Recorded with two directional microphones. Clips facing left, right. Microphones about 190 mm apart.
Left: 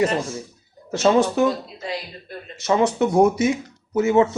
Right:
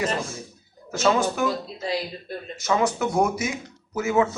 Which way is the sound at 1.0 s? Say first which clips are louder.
Left 4 dB; 30° left (ahead or behind).